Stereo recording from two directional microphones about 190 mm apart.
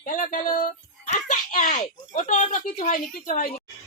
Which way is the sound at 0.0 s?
45° left (ahead or behind).